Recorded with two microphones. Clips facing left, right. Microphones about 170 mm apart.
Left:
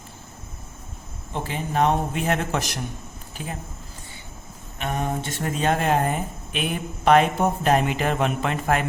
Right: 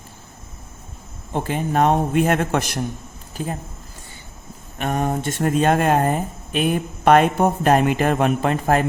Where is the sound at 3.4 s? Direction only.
40° right (ahead or behind).